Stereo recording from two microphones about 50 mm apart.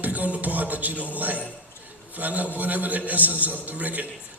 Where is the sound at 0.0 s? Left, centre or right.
Right.